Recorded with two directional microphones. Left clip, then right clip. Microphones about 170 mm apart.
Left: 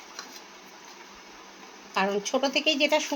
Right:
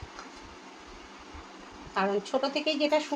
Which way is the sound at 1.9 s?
15° left (ahead or behind).